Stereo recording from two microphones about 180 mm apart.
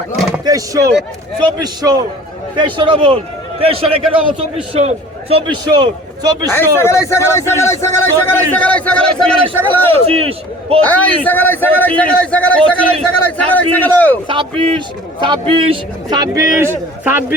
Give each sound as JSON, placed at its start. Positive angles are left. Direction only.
{"t": 0.4, "sound": "a man's voice", "side_deg": -20}
{"t": 6.7, "sound": "a man's voice", "side_deg": 15}
{"t": 9.5, "sound": "a man's voice", "side_deg": -30}
{"t": 10.8, "sound": "a man's voice", "side_deg": 10}
{"t": 14.3, "sound": "a man's voice", "side_deg": -30}